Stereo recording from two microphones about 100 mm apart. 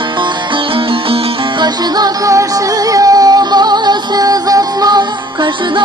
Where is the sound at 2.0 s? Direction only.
30° right (ahead or behind).